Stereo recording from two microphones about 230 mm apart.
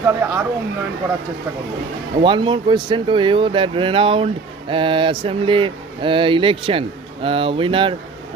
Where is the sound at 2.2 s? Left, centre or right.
Right.